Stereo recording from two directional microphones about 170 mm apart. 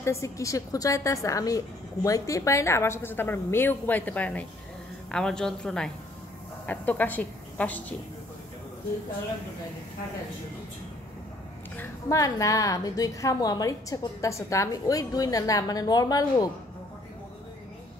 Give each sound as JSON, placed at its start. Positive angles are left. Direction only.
{"t": 0.0, "sound": "a woman's voice", "side_deg": 15}
{"t": 11.7, "sound": "a woman's voice", "side_deg": 15}